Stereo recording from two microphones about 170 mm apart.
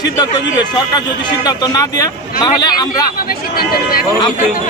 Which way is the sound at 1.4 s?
20° left (ahead or behind).